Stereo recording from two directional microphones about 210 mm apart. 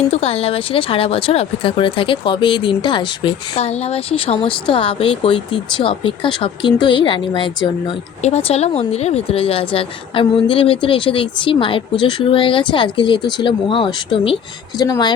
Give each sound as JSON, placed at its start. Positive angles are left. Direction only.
{"t": 0.1, "sound": "speech", "side_deg": 30}